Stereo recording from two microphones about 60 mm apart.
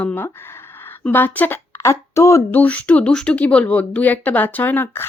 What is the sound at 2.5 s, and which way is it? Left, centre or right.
Speech, left.